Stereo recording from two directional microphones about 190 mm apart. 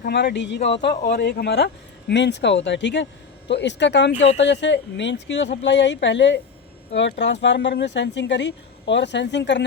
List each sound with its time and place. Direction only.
0.0 s speech: 60° left (ahead or behind)